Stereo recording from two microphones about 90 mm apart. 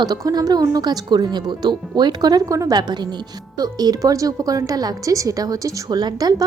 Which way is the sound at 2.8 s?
55° right (ahead or behind).